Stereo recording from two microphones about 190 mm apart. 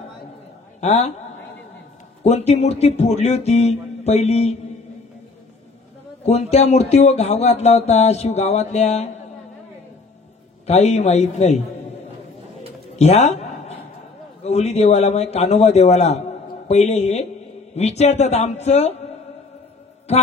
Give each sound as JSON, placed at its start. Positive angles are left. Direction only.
{"t": 0.7, "sound": "a woman's voice", "side_deg": 35}
{"t": 2.2, "sound": "speech", "side_deg": 35}
{"t": 6.2, "sound": "speech", "side_deg": 35}
{"t": 10.7, "sound": "speech", "side_deg": 35}
{"t": 12.9, "sound": "a sound", "side_deg": 35}
{"t": 14.4, "sound": "speech", "side_deg": 35}